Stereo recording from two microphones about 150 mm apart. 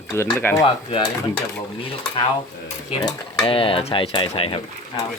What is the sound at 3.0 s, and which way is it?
Speech, 30° left (ahead or behind).